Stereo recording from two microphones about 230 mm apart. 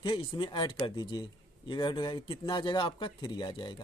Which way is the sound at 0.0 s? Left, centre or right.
Left.